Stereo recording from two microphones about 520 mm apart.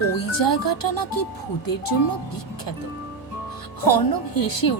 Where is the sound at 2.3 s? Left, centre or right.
Left.